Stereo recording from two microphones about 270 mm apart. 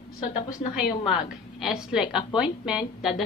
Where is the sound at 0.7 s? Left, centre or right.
Centre.